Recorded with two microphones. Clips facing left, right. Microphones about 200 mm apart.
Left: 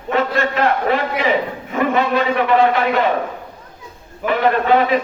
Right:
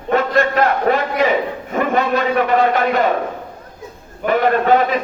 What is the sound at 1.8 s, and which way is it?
Speech, 45° right (ahead or behind).